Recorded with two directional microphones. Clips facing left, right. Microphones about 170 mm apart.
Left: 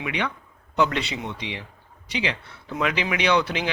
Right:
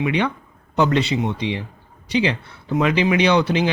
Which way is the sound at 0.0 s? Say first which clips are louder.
Right 8 dB; 30° right (ahead or behind).